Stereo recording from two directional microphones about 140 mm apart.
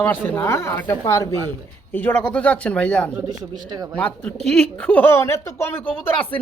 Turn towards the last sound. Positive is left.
turn(degrees=15)  # may be behind; listen again after turning